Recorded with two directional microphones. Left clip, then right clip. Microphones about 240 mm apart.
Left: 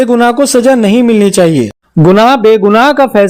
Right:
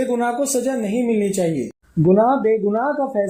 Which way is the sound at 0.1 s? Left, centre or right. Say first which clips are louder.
Left 12 dB; left.